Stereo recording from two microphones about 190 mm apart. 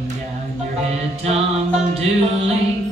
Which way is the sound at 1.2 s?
30° right (ahead or behind).